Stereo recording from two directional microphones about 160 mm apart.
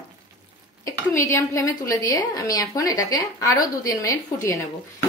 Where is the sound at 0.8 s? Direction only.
15° left (ahead or behind).